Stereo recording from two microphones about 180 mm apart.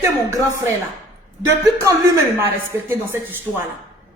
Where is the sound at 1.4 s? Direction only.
15° right (ahead or behind).